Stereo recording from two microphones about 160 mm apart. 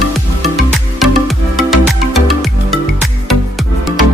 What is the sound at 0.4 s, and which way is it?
Music, centre (ahead or behind).